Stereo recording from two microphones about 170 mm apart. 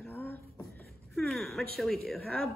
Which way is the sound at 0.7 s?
5° left (ahead or behind).